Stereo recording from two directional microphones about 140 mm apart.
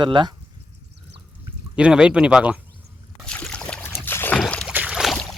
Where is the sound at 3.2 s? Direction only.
5° left (ahead or behind).